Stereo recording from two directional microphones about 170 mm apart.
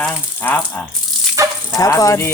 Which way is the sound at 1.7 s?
20° left (ahead or behind).